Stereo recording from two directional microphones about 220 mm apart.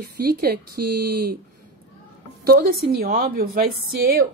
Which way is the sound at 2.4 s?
40° right (ahead or behind).